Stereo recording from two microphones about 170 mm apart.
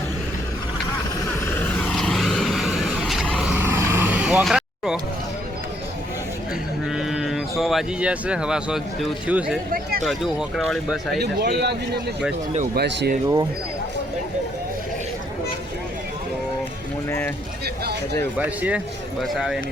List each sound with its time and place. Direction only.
1.5 s vehicle: 5° left (ahead or behind)
3.5 s vehicle: 10° right (ahead or behind)
6.8 s speech: 5° right (ahead or behind)
10.7 s speech: centre (ahead or behind)
11.2 s speech: 70° right (ahead or behind)
12.7 s speech: 85° right
17.1 s speech: 15° left (ahead or behind)
18.3 s speech: 10° right (ahead or behind)